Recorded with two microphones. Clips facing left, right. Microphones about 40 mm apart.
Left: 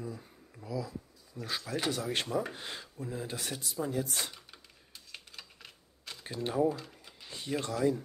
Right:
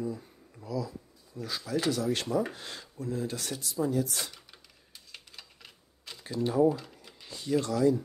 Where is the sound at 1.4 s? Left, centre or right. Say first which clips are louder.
Right 4 dB; left.